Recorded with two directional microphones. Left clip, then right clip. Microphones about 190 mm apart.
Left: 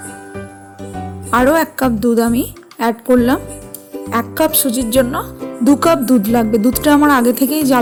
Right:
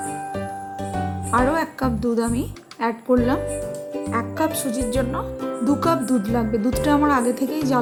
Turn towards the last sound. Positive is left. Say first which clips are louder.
# left 8 dB
turn(degrees=40)  # may be behind; listen again after turning